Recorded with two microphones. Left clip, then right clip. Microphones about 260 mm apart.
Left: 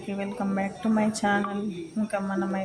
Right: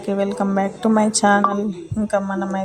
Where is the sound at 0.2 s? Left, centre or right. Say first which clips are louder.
Right 9 dB; centre.